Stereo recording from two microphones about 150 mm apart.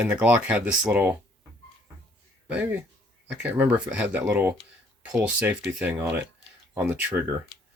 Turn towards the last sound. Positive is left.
turn(degrees=-10)  # may be behind; listen again after turning